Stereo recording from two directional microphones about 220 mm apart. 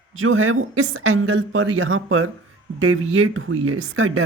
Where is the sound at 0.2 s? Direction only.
70° right (ahead or behind).